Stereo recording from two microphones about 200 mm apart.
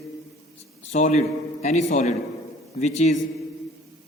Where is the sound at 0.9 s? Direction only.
35° left (ahead or behind).